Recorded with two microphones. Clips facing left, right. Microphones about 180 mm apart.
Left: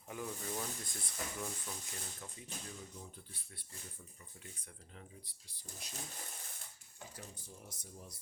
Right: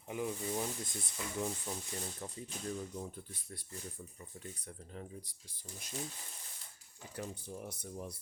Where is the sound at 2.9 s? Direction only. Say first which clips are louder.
Right 8 dB; 50° right (ahead or behind).